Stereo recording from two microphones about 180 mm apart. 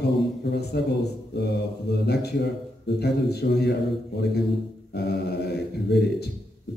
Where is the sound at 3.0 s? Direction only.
65° left (ahead or behind).